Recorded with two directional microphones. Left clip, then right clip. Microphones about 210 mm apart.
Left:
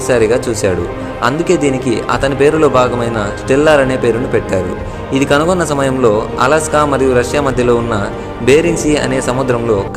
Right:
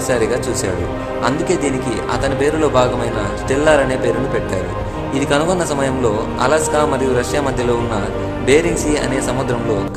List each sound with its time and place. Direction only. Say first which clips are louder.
0.1 s speech: left 6 dB; 20° left (ahead or behind)
5.1 s speech: left 5 dB; 20° left (ahead or behind)